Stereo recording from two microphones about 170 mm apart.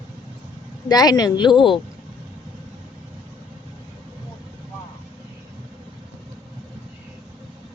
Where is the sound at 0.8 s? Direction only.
25° left (ahead or behind).